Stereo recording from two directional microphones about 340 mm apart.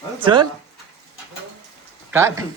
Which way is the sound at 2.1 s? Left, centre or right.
Centre.